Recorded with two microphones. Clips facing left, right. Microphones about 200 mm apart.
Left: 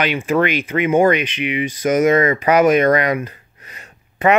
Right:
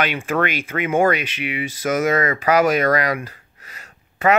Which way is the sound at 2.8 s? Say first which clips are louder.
Left 4 dB; 25° left (ahead or behind).